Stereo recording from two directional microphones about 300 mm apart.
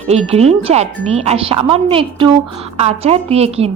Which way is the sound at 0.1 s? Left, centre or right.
Right.